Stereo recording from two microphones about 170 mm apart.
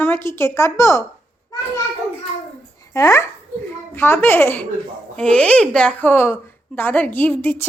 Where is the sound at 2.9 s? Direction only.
15° left (ahead or behind).